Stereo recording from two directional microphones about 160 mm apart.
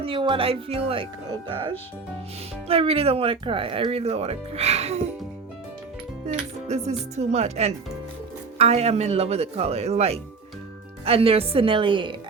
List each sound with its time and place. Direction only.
0.0 s speech: 30° right (ahead or behind)
6.2 s speech: 45° right (ahead or behind)